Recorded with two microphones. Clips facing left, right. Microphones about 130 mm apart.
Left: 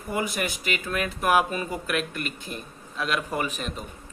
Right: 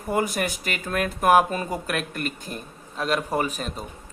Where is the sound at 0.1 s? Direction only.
45° right (ahead or behind).